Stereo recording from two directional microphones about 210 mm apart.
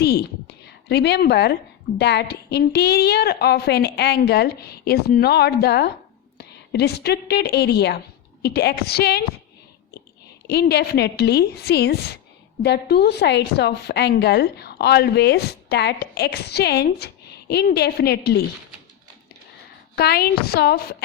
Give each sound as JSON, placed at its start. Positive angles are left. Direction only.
{"t": 0.0, "sound": "a woman's voice", "side_deg": 50}
{"t": 10.4, "sound": "a woman's voice", "side_deg": 50}
{"t": 20.0, "sound": "a woman's voice", "side_deg": 50}